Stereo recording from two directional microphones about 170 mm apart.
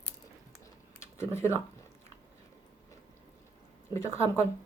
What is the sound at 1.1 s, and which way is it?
Speech, 15° left (ahead or behind).